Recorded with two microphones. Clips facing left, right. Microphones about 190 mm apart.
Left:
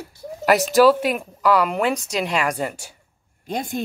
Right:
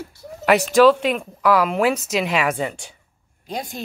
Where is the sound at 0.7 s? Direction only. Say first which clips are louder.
Right 1 dB; 5° left (ahead or behind).